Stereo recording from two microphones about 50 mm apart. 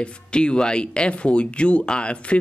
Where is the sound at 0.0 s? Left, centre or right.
Centre.